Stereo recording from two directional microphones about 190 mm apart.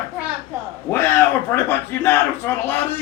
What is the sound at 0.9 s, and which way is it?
Speech, 10° left (ahead or behind).